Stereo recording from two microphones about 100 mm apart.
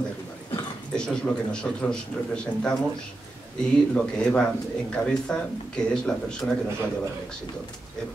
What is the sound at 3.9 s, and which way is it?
A man's voice, 10° left (ahead or behind).